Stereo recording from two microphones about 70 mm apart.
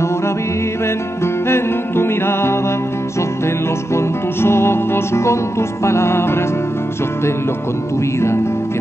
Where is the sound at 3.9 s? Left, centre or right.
Left.